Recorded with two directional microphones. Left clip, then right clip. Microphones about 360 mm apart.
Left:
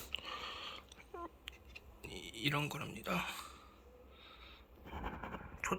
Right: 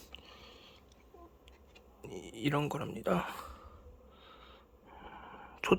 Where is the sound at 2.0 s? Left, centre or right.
Centre.